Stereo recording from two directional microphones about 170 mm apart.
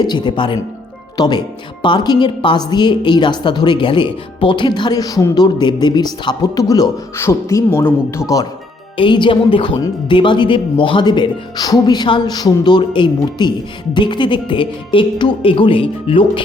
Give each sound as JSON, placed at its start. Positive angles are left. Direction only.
{"t": 0.0, "sound": "a woman's voice", "side_deg": 25}
{"t": 9.0, "sound": "a woman's voice", "side_deg": 30}